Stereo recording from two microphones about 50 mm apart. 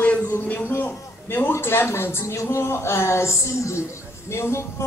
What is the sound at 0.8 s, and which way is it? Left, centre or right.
A man's voice, left.